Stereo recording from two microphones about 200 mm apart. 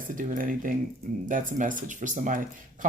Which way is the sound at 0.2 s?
45° right (ahead or behind).